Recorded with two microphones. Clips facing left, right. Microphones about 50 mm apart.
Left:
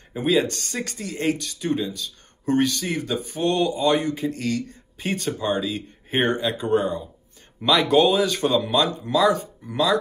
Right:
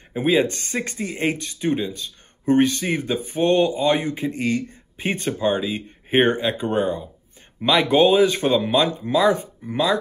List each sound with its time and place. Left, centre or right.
0.1 s speech: right